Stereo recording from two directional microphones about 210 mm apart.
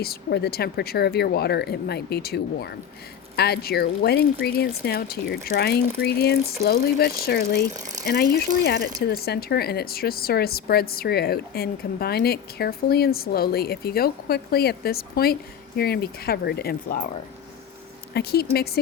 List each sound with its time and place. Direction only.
0.0 s a woman's voice: 50° left (ahead or behind)
7.7 s speech: 35° right (ahead or behind)
8.0 s a woman's voice: 50° left (ahead or behind)
18.1 s a woman's voice: 50° left (ahead or behind)